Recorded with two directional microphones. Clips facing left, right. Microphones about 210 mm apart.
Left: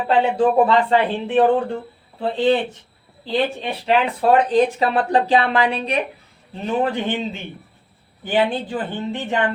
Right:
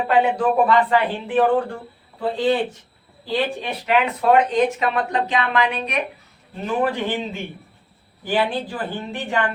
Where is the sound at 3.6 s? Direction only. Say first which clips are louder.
Left 1 dB; 30° left (ahead or behind).